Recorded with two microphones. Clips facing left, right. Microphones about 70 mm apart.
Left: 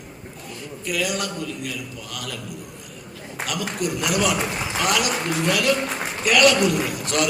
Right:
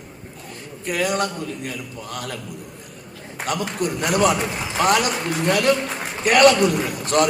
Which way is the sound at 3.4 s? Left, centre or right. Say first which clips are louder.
Right 2 dB; right.